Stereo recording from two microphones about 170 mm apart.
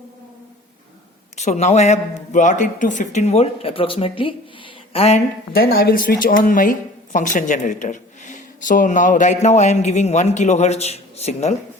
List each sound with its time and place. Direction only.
1.4 s speech: 40° left (ahead or behind)
5.5 s a woman's voice: 60° left (ahead or behind); by 11.5 s 40° left (ahead or behind)